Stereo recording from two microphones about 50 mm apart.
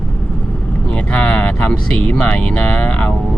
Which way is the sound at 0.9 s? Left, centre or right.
Left.